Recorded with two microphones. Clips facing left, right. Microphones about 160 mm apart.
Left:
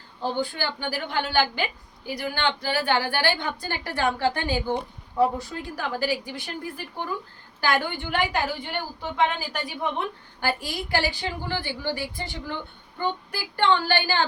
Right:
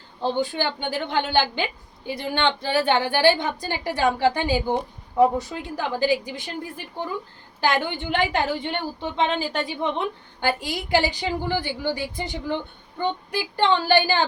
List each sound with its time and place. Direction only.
0.2 s a woman's voice: 20° right (ahead or behind)